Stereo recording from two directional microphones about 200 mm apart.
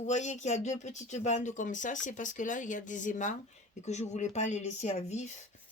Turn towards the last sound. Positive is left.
turn(degrees=35)  # may be behind; listen again after turning